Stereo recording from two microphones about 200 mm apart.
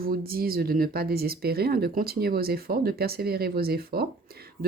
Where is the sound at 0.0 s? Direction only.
45° right (ahead or behind).